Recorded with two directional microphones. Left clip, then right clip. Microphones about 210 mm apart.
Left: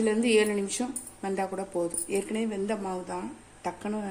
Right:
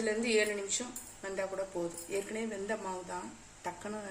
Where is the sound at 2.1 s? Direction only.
30° left (ahead or behind).